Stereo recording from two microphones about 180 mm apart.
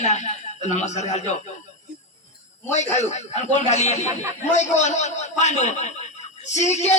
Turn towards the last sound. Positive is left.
turn(degrees=40)  # may be behind; listen again after turning